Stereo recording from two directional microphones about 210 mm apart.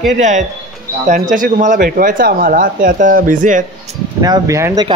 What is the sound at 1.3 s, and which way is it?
Speech, 40° right (ahead or behind).